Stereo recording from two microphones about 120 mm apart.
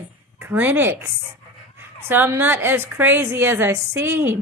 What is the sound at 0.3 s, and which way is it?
A woman's voice, 15° right (ahead or behind).